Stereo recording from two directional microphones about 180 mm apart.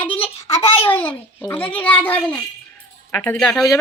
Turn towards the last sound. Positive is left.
turn(degrees=5)  # may be behind; listen again after turning